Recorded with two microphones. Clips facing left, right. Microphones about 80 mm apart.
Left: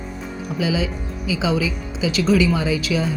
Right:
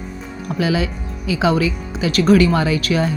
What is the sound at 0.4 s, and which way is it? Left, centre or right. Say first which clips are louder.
A woman's voice: right 3 dB; right.